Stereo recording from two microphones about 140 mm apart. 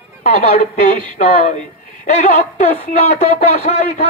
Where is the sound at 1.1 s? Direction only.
60° left (ahead or behind).